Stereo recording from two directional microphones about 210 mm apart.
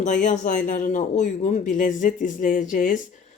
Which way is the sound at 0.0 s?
35° left (ahead or behind).